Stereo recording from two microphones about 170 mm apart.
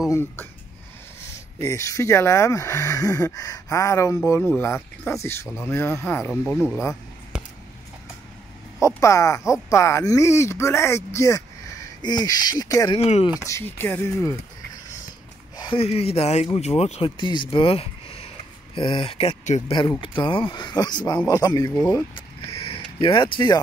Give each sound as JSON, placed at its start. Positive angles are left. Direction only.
{"t": 1.6, "sound": "speech", "side_deg": 20}
{"t": 6.3, "sound": "speech", "side_deg": 0}
{"t": 8.8, "sound": "speech", "side_deg": 20}
{"t": 12.9, "sound": "speech", "side_deg": 35}
{"t": 13.4, "sound": "speech", "side_deg": 15}
{"t": 15.5, "sound": "speech", "side_deg": 30}
{"t": 20.0, "sound": "speech", "side_deg": 30}
{"t": 22.1, "sound": "a sound", "side_deg": 35}
{"t": 22.9, "sound": "speech", "side_deg": 30}